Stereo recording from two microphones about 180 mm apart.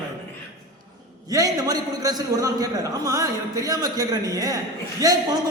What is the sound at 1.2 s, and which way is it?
A man's voice, 20° right (ahead or behind).